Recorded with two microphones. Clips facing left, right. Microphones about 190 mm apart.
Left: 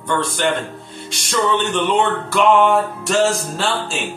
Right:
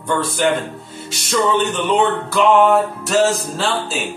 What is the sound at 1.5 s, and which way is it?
Speech, centre (ahead or behind).